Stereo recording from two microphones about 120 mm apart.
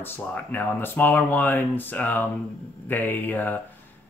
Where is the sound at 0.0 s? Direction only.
15° left (ahead or behind).